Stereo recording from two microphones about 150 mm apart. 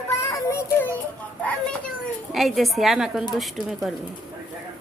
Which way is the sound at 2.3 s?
Centre (ahead or behind).